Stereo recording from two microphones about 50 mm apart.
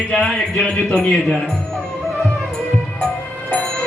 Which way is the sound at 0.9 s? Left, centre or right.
Left.